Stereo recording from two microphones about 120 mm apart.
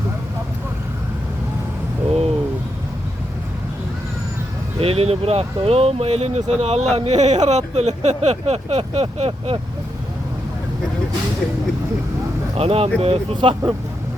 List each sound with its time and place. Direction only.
2.0 s a sound: 55° right (ahead or behind)
4.8 s speech: 55° right (ahead or behind)
12.5 s speech: 55° right (ahead or behind)